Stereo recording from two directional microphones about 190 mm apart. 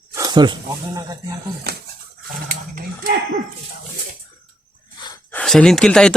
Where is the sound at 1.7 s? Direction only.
55° right (ahead or behind).